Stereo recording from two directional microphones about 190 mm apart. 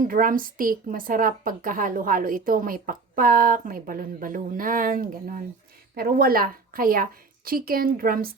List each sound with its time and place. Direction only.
0.1 s a woman's voice: 45° right (ahead or behind)